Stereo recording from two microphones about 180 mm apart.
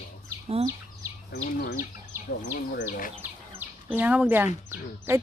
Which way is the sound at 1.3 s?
60° left (ahead or behind).